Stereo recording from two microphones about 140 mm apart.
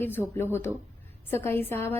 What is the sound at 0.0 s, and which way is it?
A woman's voice, 15° left (ahead or behind).